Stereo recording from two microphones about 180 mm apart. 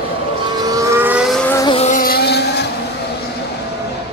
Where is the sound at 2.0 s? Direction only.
60° left (ahead or behind).